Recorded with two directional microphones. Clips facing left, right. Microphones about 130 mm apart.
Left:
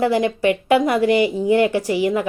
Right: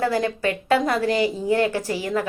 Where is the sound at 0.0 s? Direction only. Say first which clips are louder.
Left 5 dB; 15° left (ahead or behind).